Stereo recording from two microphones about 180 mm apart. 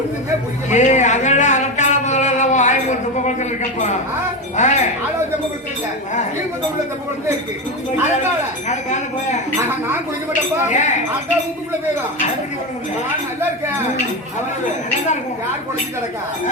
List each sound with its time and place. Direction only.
0.7 s a sound: 40° left (ahead or behind)
4.5 s speech: 40° left (ahead or behind)
8.7 s speech: 40° left (ahead or behind)
10.7 s speech: 40° left (ahead or behind)